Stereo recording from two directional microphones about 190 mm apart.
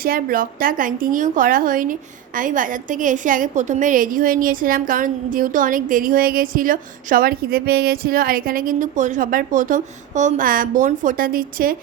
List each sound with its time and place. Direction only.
0.0 s a woman's voice: 50° right (ahead or behind)